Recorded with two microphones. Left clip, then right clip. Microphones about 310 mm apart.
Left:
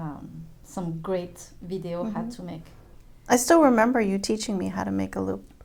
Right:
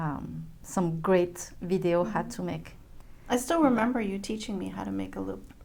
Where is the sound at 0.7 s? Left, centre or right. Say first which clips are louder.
Right 4 dB; right.